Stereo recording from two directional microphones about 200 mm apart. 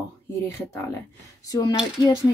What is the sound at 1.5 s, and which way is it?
Speech, 20° left (ahead or behind).